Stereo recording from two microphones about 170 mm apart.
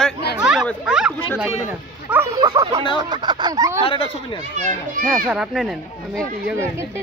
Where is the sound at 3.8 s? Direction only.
30° left (ahead or behind).